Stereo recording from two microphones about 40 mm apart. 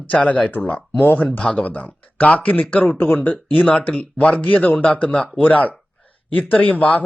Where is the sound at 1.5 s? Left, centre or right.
Left.